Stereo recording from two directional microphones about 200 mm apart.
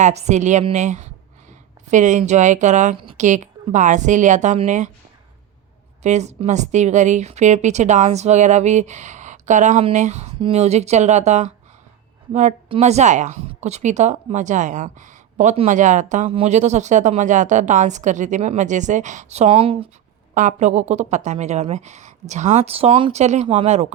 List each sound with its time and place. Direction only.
0.0 s a woman's voice: 35° right (ahead or behind)
6.0 s a woman's voice: 35° right (ahead or behind)
20.3 s a woman's voice: 40° right (ahead or behind)